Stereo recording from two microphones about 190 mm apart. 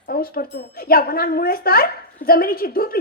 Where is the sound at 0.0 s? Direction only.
50° left (ahead or behind).